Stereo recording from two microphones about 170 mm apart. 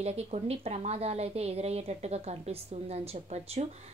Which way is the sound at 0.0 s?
40° right (ahead or behind).